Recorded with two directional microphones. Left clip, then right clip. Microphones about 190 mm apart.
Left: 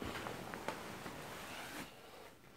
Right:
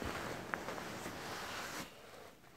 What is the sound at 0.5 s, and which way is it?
Walk, 35° right (ahead or behind).